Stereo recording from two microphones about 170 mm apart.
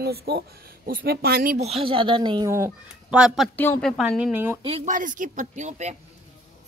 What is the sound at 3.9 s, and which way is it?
Speech, centre (ahead or behind).